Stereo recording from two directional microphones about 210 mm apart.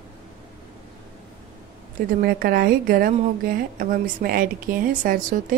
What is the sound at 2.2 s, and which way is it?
A woman's voice, 45° right (ahead or behind).